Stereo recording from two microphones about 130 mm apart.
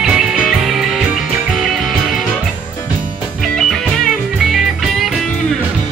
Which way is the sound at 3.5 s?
5° left (ahead or behind).